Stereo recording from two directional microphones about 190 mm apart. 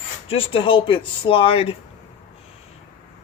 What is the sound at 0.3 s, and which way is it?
Speech, 30° left (ahead or behind).